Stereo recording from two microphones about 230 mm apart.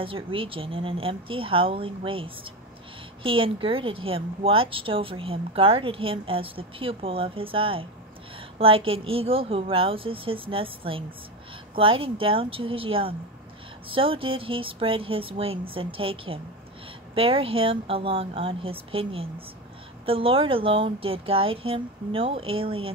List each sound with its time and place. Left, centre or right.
0.0 s a woman's voice: right